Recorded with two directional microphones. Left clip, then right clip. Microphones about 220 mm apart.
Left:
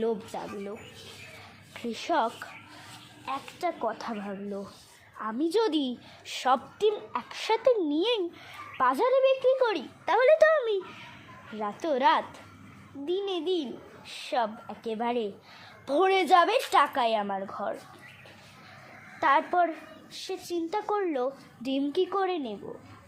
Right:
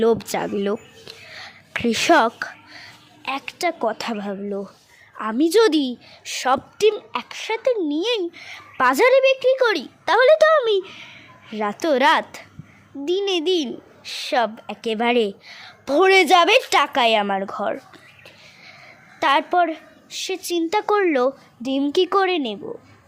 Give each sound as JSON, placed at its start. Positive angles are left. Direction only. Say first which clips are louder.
{"t": 0.0, "sound": "speech", "louder": "right 12 dB", "side_deg": -45}
{"t": 1.7, "sound": "a woman's voice", "louder": "right 13 dB", "side_deg": -40}
{"t": 5.8, "sound": "a woman's voice", "louder": "right 7 dB", "side_deg": -25}
{"t": 7.4, "sound": "a woman's voice", "louder": "right 3 dB", "side_deg": -5}
{"t": 19.2, "sound": "a woman's voice", "louder": "right 6 dB", "side_deg": -30}
{"t": 21.6, "sound": "a woman's voice", "louder": "right 8 dB", "side_deg": -30}
{"t": 22.0, "sound": "speech", "louder": "right 10 dB", "side_deg": -45}